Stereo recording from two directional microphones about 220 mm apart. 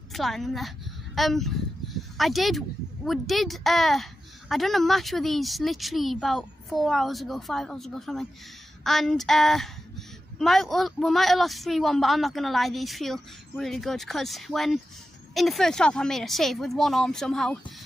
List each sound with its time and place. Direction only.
0.1 s a woman's voice: centre (ahead or behind)